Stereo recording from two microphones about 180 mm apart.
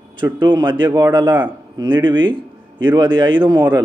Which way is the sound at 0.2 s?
25° right (ahead or behind).